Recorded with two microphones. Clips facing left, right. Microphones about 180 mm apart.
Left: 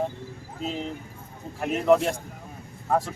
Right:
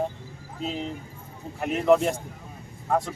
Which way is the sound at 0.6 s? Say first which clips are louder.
Even; centre (ahead or behind).